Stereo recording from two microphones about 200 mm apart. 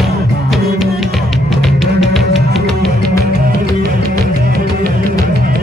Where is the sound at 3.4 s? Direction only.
45° right (ahead or behind).